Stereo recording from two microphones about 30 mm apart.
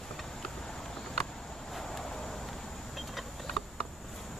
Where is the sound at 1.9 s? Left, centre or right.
Left.